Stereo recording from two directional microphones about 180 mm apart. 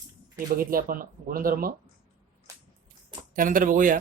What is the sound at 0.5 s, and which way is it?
Speech, 55° right (ahead or behind).